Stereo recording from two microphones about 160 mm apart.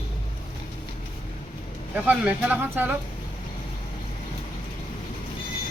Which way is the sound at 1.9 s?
10° right (ahead or behind).